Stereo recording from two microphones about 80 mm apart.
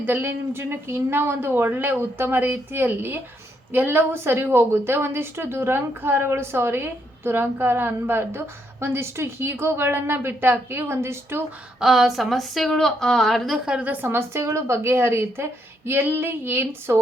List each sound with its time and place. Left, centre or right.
0.0 s a woman's voice: right
11.8 s a woman's voice: centre
13.7 s a woman's voice: centre